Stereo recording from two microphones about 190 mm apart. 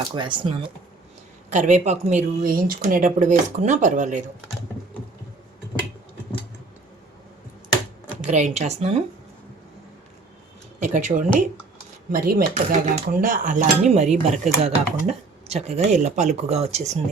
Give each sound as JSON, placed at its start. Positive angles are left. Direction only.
{"t": 0.1, "sound": "speech", "side_deg": -25}
{"t": 1.5, "sound": "speech", "side_deg": -40}
{"t": 2.4, "sound": "speech", "side_deg": -50}
{"t": 8.3, "sound": "speech", "side_deg": -35}
{"t": 10.8, "sound": "speech", "side_deg": -40}
{"t": 12.1, "sound": "speech", "side_deg": -50}